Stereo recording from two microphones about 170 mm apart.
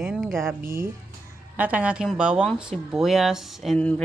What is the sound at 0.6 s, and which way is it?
Speech, 15° right (ahead or behind).